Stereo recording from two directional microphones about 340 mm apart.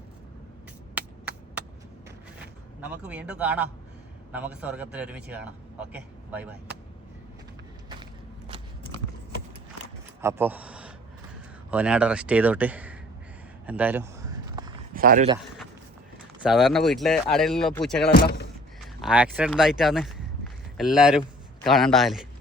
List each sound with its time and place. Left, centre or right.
2.8 s a man's voice: centre
10.2 s a sound: centre
11.7 s a man's voice: centre
13.7 s a sound: centre
14.9 s a man's voice: right
16.4 s a man's voice: centre
18.1 s speech: left
18.8 s a man's voice: centre